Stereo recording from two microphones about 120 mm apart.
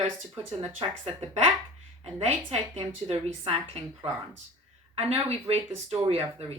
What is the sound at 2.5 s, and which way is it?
A woman's voice, 55° right (ahead or behind).